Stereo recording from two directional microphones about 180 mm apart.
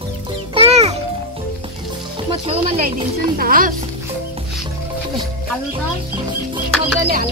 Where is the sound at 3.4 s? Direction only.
50° right (ahead or behind).